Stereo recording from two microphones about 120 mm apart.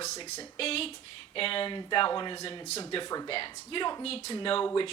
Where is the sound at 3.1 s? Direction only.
30° left (ahead or behind).